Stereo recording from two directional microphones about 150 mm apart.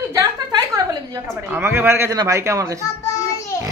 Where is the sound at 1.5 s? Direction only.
15° right (ahead or behind).